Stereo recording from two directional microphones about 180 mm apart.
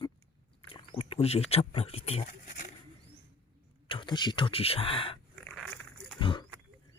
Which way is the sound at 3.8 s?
25° left (ahead or behind).